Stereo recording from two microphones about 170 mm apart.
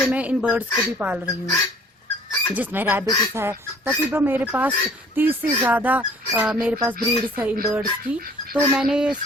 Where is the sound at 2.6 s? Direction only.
10° right (ahead or behind).